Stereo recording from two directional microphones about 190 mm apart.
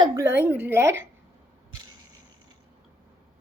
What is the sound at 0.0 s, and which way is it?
A woman's voice, 15° right (ahead or behind).